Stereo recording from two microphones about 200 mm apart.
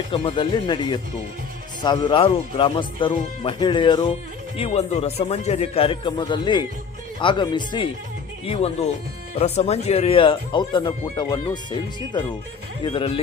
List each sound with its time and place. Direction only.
0.1 s speech: 25° left (ahead or behind)